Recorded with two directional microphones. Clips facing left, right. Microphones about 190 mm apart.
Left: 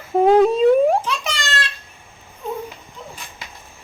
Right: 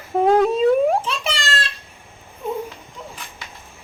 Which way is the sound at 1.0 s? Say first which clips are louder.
Even; 30° right (ahead or behind).